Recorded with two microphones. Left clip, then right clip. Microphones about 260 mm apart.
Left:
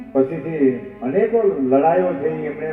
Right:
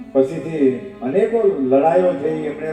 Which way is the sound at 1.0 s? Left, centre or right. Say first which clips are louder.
Right 1 dB; right.